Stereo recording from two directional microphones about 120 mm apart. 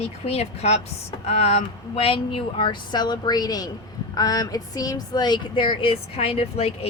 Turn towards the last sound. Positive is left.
turn(degrees=55)  # may be behind; listen again after turning